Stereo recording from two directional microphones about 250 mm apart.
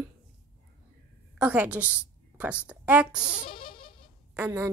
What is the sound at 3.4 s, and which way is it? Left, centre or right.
Music, left.